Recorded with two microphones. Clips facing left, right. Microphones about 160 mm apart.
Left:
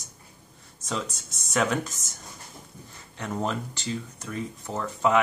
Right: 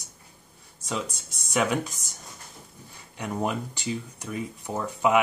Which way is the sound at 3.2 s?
10° right (ahead or behind).